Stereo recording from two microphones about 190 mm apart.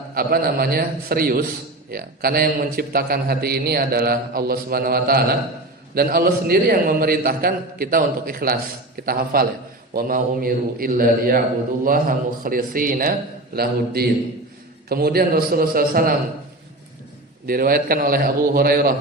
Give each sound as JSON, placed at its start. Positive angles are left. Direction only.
{"t": 0.1, "sound": "a man's voice", "side_deg": -50}
{"t": 17.4, "sound": "a man's voice", "side_deg": -50}